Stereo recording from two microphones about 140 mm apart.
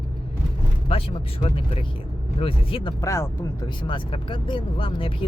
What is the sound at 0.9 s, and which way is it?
Speech, 40° left (ahead or behind).